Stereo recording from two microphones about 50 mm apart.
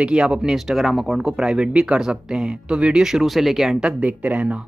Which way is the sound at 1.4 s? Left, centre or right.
Centre.